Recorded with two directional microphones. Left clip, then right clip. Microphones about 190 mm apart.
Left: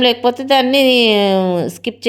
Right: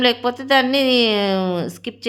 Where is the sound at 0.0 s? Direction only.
15° left (ahead or behind).